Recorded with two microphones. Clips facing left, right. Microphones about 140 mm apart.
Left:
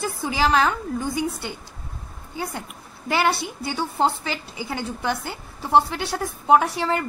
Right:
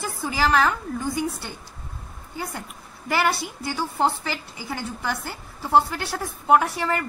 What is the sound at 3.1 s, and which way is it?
A woman's voice, 20° left (ahead or behind).